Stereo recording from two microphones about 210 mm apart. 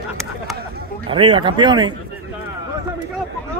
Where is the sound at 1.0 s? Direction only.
25° right (ahead or behind).